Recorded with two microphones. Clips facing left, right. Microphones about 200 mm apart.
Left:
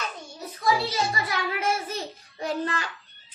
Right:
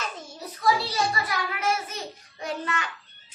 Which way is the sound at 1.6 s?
30° left (ahead or behind).